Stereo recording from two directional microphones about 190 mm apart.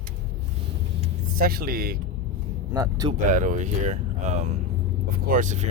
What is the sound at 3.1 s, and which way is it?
Speech, 40° right (ahead or behind).